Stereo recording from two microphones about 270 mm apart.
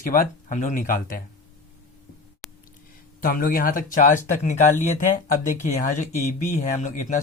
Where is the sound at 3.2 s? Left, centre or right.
Left.